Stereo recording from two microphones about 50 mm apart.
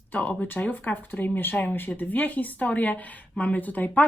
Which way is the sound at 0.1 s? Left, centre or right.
Left.